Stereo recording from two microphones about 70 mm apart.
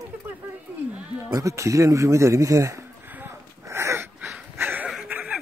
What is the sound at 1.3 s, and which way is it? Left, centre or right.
Speech, right.